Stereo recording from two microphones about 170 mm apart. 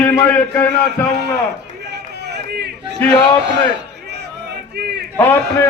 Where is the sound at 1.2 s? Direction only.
85° right.